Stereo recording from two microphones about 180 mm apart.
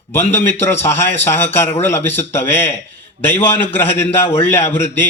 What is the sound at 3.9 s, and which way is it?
Speech, 35° left (ahead or behind).